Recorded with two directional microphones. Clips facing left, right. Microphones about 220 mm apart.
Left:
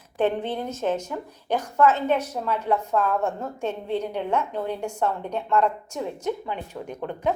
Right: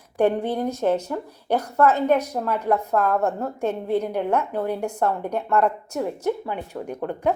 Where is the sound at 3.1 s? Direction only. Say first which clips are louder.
Right 3 dB; 35° right (ahead or behind).